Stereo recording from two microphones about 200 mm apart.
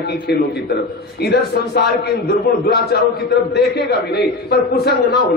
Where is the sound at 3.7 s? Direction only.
55° left (ahead or behind).